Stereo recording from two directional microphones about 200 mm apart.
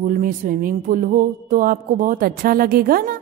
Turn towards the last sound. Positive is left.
turn(degrees=-50)  # may be behind; listen again after turning